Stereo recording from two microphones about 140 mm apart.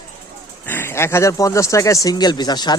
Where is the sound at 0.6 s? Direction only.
15° left (ahead or behind).